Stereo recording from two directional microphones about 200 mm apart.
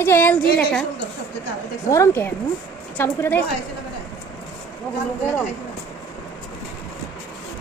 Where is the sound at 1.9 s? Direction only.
15° left (ahead or behind).